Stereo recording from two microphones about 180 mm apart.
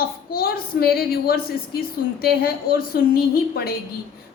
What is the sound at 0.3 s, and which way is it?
A woman's voice, 55° left (ahead or behind).